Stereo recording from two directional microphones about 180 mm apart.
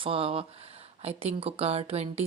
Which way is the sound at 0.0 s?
30° right (ahead or behind).